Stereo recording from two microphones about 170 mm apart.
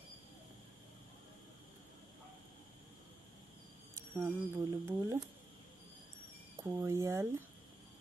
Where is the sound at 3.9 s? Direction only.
10° right (ahead or behind).